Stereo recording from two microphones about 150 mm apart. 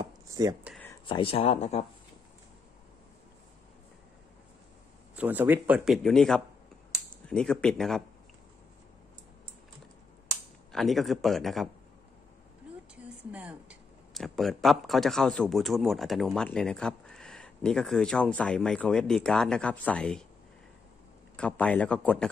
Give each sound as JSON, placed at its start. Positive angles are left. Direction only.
{"t": 0.0, "sound": "a sound", "side_deg": -25}
{"t": 1.0, "sound": "speech", "side_deg": 35}
{"t": 5.1, "sound": "speech", "side_deg": -10}
{"t": 5.9, "sound": "speech", "side_deg": 5}
{"t": 10.7, "sound": "speech", "side_deg": 0}
{"t": 12.9, "sound": "speech", "side_deg": -10}
{"t": 21.4, "sound": "a man's voice", "side_deg": 10}